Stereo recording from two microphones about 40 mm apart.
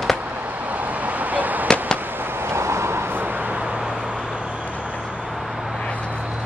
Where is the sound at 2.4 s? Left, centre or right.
Right.